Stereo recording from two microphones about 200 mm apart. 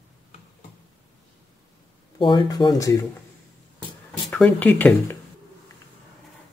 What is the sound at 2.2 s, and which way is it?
Speech, 25° left (ahead or behind).